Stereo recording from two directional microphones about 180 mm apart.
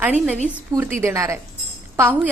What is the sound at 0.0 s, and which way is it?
A woman's voice, 5° right (ahead or behind).